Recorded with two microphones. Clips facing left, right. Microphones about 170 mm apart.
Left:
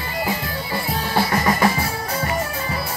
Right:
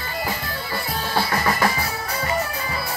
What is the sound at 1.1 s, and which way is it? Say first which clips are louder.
Drum: left 3 dB; 20° left (ahead or behind).